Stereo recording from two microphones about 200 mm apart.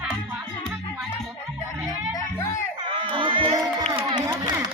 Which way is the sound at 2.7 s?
25° right (ahead or behind).